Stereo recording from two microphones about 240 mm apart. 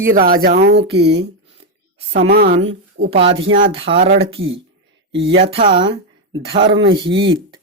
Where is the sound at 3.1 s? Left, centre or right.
Right.